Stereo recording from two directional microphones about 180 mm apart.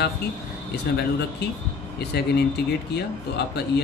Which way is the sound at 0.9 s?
65° left (ahead or behind).